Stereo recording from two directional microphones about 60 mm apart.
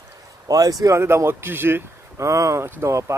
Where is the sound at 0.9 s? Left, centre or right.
Right.